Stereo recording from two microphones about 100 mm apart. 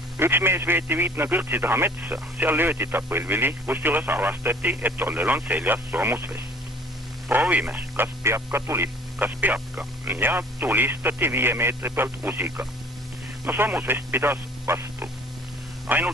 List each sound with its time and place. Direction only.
0.2 s speech: 20° right (ahead or behind)